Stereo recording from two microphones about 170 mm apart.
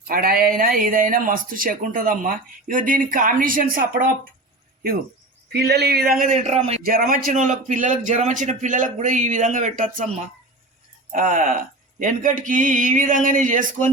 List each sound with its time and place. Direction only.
0.1 s speech: 60° right (ahead or behind)
5.5 s speech: 75° right (ahead or behind); by 6.3 s 60° right (ahead or behind)
6.3 s a man's voice: 40° right (ahead or behind)
6.8 s a man's voice: 55° right (ahead or behind)
11.1 s a man's voice: 50° right (ahead or behind)